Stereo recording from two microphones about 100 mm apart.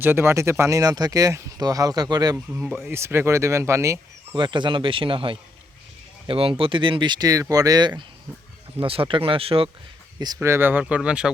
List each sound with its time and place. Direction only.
0.0 s speech: 25° right (ahead or behind); by 2.3 s 40° right (ahead or behind)
2.8 s speech: 25° right (ahead or behind)
4.4 s speech: 50° right (ahead or behind)
8.8 s speech: 60° right (ahead or behind)
10.2 s speech: 45° right (ahead or behind)
10.4 s speech: 25° right (ahead or behind)